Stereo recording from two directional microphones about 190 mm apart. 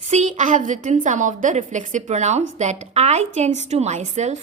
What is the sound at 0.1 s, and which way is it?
A woman's voice, 40° right (ahead or behind).